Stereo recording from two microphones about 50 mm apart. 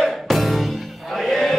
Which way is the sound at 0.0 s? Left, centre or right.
Centre.